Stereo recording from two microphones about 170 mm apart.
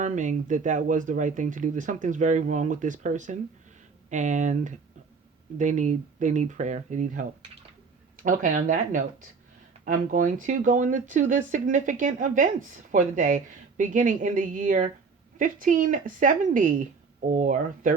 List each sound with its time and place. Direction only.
0.0 s speech: 45° right (ahead or behind)